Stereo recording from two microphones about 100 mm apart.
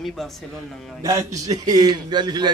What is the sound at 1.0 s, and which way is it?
A man's voice, 35° right (ahead or behind).